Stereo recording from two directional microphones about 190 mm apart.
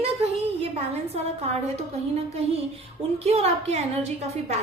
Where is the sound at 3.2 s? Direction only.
35° right (ahead or behind).